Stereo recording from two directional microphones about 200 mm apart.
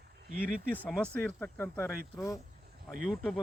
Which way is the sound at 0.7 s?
5° left (ahead or behind).